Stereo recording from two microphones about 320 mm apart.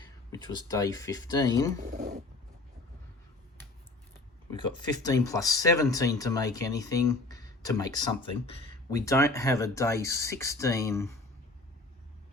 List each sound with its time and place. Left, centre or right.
0.3 s speech: centre
1.8 s a sound: right
4.5 s speech: centre